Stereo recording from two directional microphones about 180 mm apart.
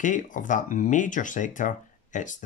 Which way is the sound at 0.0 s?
45° left (ahead or behind).